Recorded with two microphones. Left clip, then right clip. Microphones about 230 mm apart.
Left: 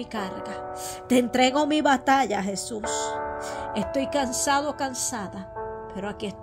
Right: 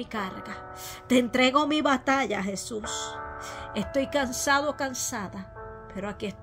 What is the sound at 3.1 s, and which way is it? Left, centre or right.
Music, left.